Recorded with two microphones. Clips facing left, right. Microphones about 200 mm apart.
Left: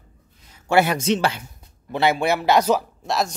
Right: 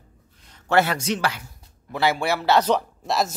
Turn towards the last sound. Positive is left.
turn(degrees=0)  # may be behind; listen again after turning